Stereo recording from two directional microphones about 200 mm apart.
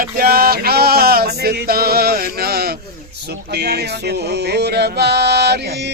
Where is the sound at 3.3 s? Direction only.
55° right (ahead or behind).